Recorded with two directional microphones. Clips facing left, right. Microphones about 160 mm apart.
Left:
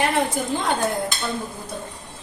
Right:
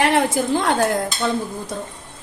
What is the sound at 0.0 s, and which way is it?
Speech, 85° right.